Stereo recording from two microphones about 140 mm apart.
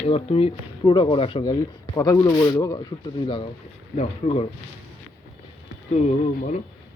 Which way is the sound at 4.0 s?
50° left (ahead or behind).